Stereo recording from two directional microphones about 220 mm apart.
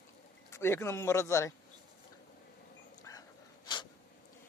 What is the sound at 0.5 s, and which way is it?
Speech, 10° left (ahead or behind).